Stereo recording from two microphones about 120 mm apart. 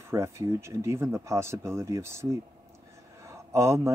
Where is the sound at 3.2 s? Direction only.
25° right (ahead or behind).